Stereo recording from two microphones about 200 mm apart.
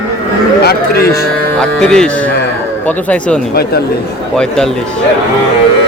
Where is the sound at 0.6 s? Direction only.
50° left (ahead or behind).